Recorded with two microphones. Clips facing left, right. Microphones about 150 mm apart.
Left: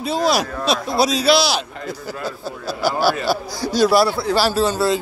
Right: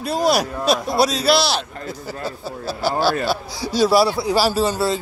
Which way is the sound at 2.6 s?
30° right (ahead or behind).